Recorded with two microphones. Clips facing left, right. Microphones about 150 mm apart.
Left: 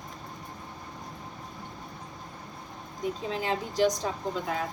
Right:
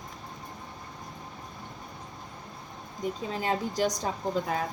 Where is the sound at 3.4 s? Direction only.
45° right (ahead or behind).